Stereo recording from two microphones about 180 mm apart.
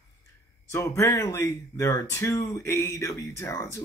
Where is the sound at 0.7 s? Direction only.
15° left (ahead or behind).